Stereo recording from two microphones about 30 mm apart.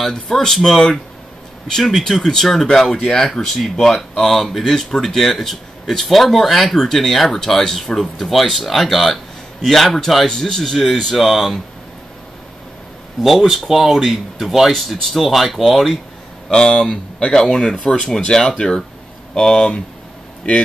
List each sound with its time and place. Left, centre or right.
0.0 s speech: centre
2.0 s a man's voice: centre
13.2 s speech: centre
16.4 s speech: left
17.7 s speech: left; by 19.7 s centre
20.4 s speech: left